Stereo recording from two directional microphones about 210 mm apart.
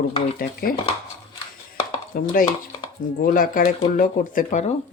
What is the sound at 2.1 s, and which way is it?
Speech, 45° left (ahead or behind).